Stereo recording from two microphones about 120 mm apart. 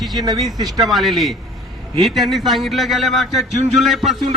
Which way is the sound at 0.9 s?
Centre (ahead or behind).